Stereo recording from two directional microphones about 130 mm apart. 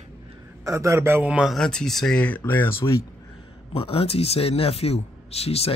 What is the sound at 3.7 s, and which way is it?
Speech, 45° left (ahead or behind).